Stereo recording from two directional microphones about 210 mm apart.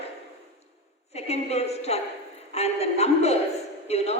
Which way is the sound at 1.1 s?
30° left (ahead or behind).